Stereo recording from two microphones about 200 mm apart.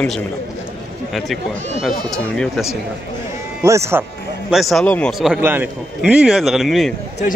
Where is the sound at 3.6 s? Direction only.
15° right (ahead or behind).